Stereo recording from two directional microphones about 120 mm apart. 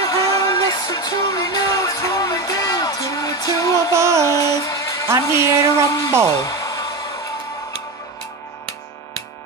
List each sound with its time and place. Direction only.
0.0 s music: 30° left (ahead or behind)
3.9 s music: 25° right (ahead or behind)
4.3 s music: 30° left (ahead or behind)
5.2 s speech: 30° left (ahead or behind)
6.2 s a sound: 30° left (ahead or behind)